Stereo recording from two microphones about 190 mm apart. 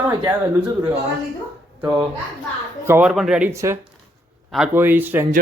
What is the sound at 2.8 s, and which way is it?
Speech, 10° right (ahead or behind).